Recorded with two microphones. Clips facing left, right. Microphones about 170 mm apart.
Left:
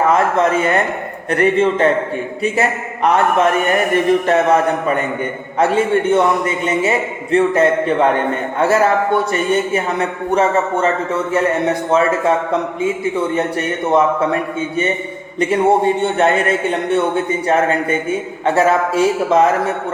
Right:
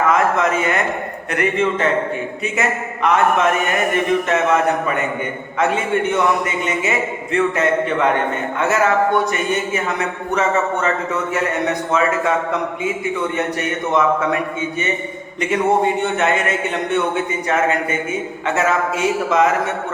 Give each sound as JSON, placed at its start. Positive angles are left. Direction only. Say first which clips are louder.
{"t": 0.1, "sound": "a man's voice", "louder": "left 2 dB", "side_deg": 30}
{"t": 15.4, "sound": "a man's voice", "louder": "left 3 dB", "side_deg": 30}
{"t": 18.4, "sound": "a man's voice", "louder": "left 5 dB", "side_deg": 30}